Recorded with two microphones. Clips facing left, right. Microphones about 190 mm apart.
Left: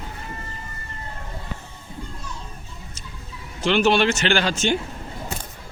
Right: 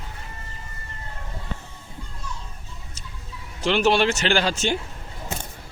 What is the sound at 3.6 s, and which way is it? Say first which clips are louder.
Speech: left 1 dB; 35° right (ahead or behind).